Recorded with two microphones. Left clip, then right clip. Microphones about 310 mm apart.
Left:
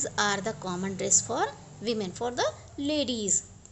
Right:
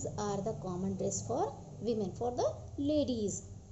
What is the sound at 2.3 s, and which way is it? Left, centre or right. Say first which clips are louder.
A woman's voice: left 5 dB; left.